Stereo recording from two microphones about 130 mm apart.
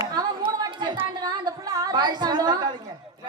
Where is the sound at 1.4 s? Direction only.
35° right (ahead or behind).